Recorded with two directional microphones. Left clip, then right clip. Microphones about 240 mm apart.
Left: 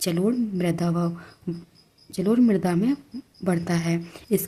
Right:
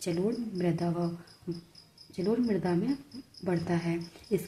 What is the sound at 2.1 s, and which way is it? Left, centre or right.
Speech, left.